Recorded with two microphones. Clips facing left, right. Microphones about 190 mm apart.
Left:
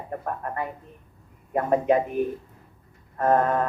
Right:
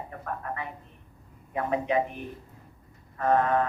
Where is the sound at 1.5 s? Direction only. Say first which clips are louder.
Left 5 dB; 45° left (ahead or behind).